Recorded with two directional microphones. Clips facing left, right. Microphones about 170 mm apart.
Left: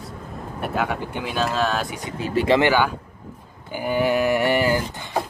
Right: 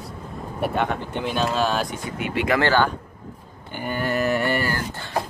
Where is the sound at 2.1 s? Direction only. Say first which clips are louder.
Left 7 dB; 35° left (ahead or behind).